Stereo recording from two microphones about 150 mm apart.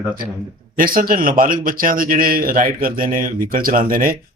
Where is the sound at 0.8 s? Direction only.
70° right (ahead or behind).